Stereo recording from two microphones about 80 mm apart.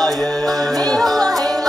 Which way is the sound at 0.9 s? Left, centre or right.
Centre.